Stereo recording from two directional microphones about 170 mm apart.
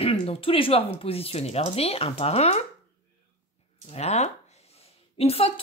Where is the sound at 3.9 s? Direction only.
40° left (ahead or behind).